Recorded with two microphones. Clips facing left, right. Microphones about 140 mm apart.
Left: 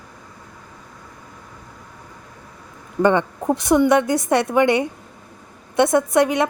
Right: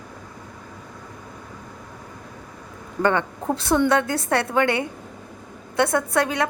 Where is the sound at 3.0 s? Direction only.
20° left (ahead or behind).